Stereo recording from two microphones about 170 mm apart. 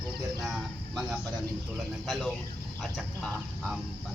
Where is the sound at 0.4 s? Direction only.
Centre (ahead or behind).